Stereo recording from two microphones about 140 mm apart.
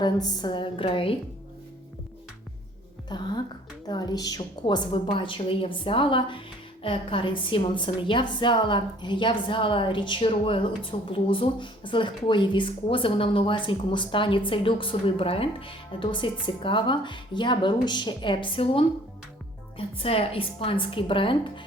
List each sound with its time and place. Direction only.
0.0 s speech: 30° left (ahead or behind)
3.1 s speech: 30° left (ahead or behind)